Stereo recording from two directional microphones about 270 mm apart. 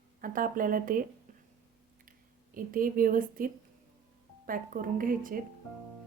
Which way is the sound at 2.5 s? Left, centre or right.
Right.